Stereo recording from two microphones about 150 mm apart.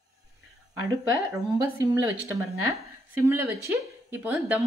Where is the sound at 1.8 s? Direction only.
15° right (ahead or behind).